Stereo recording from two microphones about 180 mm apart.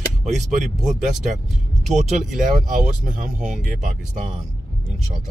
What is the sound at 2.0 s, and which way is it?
Speech, 45° right (ahead or behind).